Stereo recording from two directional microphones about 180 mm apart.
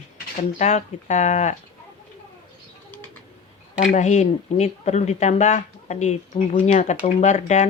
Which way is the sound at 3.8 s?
40° left (ahead or behind).